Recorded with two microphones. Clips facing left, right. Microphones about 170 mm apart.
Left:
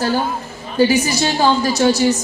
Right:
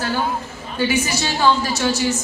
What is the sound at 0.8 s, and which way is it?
A woman's voice, 40° left (ahead or behind).